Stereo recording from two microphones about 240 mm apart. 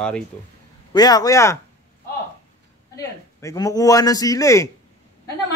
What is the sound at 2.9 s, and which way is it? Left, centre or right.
A man's voice, centre.